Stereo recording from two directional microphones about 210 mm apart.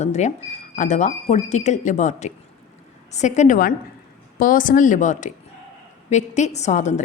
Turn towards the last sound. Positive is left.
turn(degrees=35)  # may be behind; listen again after turning